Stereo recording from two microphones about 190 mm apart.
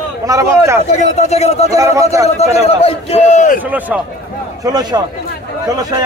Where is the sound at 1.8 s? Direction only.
15° right (ahead or behind).